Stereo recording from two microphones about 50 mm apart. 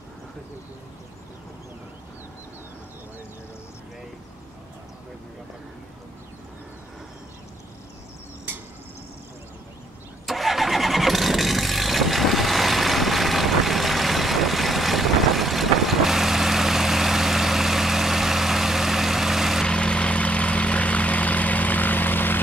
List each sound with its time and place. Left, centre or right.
10.2 s vehicle: centre
19.6 s vehicle: centre; by 22.4 s left